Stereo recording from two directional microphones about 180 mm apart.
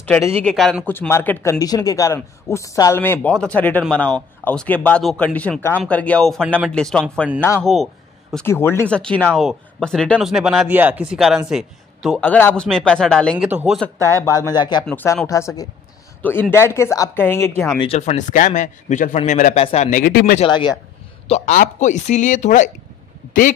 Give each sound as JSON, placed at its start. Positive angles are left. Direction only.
{"t": 0.4, "sound": "speech", "side_deg": 5}
{"t": 7.6, "sound": "speech", "side_deg": 0}
{"t": 8.5, "sound": "speech", "side_deg": 15}
{"t": 13.5, "sound": "speech", "side_deg": -10}
{"t": 14.1, "sound": "speech", "side_deg": 15}
{"t": 14.9, "sound": "speech", "side_deg": 5}
{"t": 17.7, "sound": "a man's voice", "side_deg": 35}
{"t": 20.3, "sound": "speech", "side_deg": 25}
{"t": 21.3, "sound": "a man's voice", "side_deg": 45}